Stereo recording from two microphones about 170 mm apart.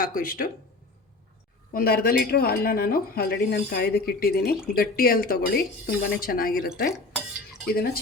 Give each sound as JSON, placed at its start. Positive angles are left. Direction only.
{"t": 0.0, "sound": "speech", "side_deg": 55}
{"t": 1.7, "sound": "speech", "side_deg": 60}
{"t": 7.7, "sound": "speech", "side_deg": 65}